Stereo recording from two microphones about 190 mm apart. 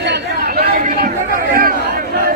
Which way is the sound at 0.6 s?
45° right (ahead or behind).